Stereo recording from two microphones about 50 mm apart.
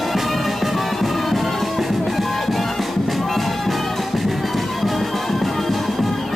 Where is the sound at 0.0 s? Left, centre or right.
Centre.